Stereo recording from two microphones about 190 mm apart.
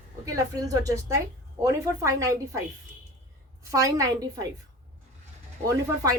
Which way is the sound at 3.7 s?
15° right (ahead or behind).